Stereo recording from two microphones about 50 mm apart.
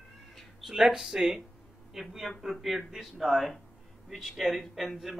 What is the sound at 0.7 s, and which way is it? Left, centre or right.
A man's voice, centre.